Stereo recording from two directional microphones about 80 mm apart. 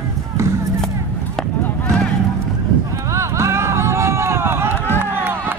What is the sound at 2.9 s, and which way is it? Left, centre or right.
Run, right.